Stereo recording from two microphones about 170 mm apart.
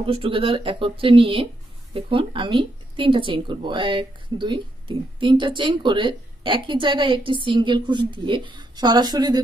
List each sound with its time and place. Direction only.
0.0 s speech: 30° right (ahead or behind)